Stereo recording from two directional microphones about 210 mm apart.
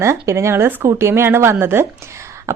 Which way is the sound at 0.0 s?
15° right (ahead or behind).